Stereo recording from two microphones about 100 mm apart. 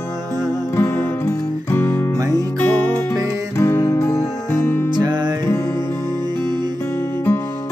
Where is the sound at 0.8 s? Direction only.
25° left (ahead or behind).